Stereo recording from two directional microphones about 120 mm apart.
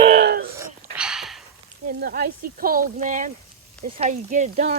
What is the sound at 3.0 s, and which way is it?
Speech, 90° right.